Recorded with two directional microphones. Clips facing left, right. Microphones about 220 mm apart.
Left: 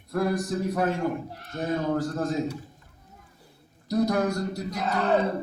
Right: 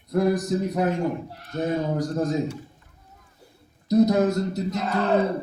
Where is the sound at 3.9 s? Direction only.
20° right (ahead or behind).